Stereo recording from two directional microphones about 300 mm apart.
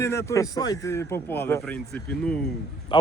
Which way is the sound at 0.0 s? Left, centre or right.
Centre.